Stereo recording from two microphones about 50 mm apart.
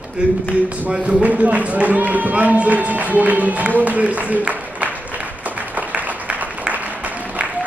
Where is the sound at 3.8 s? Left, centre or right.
Right.